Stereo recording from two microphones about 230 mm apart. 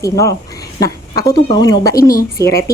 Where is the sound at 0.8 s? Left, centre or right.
Centre.